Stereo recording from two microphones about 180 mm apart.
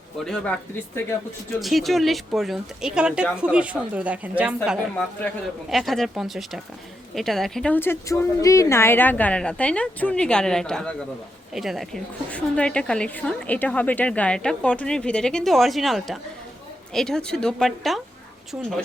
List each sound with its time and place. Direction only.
0.3 s a woman's voice: 5° left (ahead or behind); by 18.7 s 10° right (ahead or behind)